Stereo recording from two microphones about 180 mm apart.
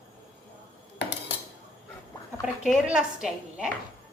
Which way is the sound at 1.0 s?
75° left (ahead or behind).